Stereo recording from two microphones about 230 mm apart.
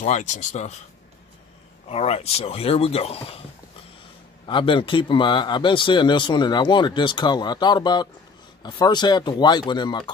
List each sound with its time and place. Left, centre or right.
0.0 s speech: left
1.9 s speech: left
4.5 s speech: left